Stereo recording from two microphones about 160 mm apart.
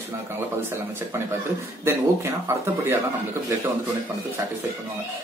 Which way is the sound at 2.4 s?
15° right (ahead or behind).